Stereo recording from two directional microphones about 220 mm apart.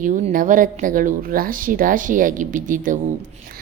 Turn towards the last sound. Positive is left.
turn(degrees=-35)  # may be behind; listen again after turning